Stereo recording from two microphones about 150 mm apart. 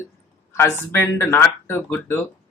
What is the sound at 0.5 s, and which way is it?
Speech, 15° left (ahead or behind).